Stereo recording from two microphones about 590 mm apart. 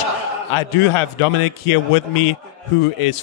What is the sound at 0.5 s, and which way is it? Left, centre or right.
A man's voice, left.